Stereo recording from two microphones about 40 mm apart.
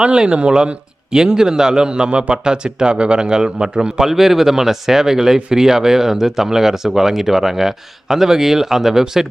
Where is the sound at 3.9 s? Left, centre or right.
Centre.